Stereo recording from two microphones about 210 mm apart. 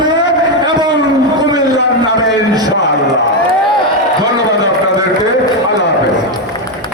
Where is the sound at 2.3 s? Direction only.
20° right (ahead or behind).